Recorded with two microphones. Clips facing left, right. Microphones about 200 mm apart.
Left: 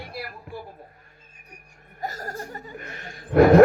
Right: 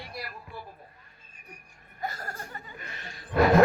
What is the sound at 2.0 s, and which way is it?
Chuckle, 40° left (ahead or behind).